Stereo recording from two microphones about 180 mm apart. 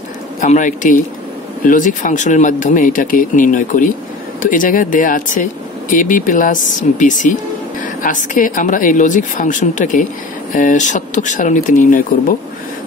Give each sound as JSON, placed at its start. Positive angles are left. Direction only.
{"t": 0.4, "sound": "speech", "side_deg": 45}